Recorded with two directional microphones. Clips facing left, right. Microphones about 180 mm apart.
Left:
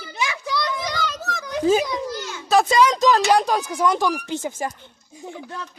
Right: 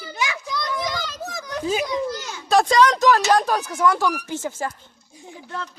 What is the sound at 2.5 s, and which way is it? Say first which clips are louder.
A child's voice: even; 5° left (ahead or behind).